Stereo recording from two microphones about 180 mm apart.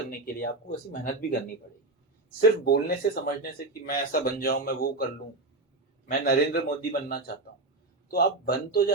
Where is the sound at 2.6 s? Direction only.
55° left (ahead or behind).